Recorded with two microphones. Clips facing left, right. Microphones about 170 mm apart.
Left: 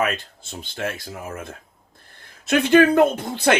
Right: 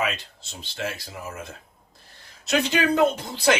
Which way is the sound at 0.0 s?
50° left (ahead or behind).